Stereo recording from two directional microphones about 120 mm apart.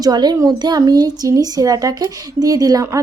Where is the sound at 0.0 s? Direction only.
35° right (ahead or behind).